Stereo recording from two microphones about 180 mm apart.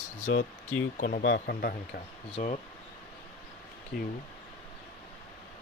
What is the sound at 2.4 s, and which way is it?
Speech, 45° left (ahead or behind).